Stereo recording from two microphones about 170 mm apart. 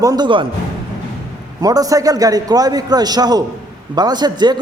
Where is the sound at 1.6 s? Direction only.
20° right (ahead or behind).